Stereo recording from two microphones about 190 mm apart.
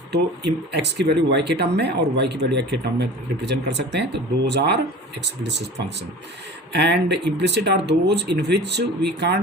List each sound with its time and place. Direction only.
0.1 s speech: 60° right (ahead or behind)